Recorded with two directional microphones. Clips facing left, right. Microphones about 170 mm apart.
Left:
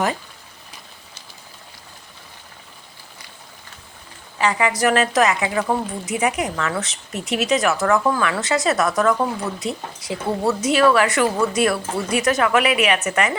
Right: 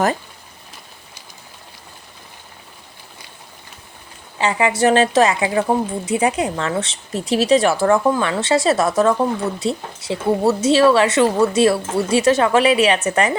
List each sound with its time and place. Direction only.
4.4 s speech: 25° right (ahead or behind)